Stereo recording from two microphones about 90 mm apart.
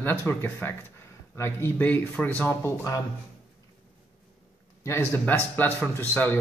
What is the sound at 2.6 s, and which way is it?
Speech, 30° left (ahead or behind).